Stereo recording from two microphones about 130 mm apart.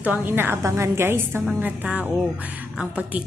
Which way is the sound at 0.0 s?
15° right (ahead or behind).